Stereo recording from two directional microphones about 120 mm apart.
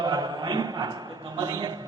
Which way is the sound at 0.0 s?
35° right (ahead or behind).